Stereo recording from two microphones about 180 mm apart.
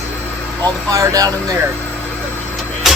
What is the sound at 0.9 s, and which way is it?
Speech, 20° right (ahead or behind).